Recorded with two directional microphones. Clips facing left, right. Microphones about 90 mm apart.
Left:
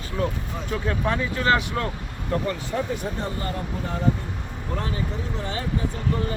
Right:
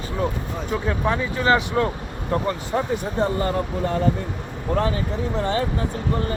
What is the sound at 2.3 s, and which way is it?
Speech, 25° right (ahead or behind).